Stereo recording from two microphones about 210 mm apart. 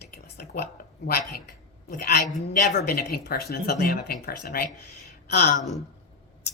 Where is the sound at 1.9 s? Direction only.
45° left (ahead or behind).